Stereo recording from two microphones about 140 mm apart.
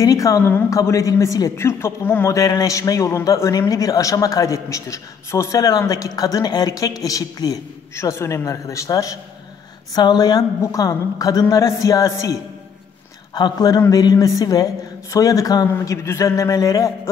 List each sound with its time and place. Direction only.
0.0 s a woman's voice: 25° left (ahead or behind)